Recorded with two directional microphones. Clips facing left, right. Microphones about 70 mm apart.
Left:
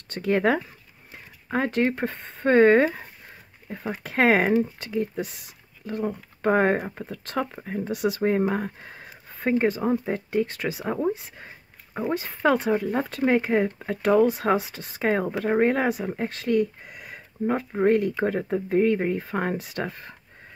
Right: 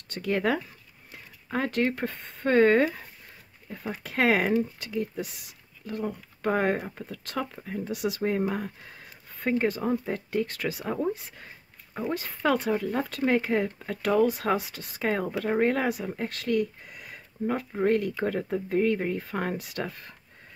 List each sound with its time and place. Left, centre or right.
0.1 s speech: left
9.4 s speech: left